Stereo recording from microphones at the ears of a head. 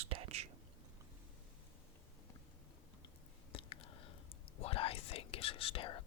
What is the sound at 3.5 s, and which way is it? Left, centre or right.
Whispering, left.